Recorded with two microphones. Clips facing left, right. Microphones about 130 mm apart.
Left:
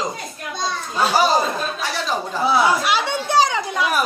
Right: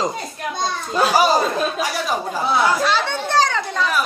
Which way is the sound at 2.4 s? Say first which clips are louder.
Left 1 dB; 10° left (ahead or behind).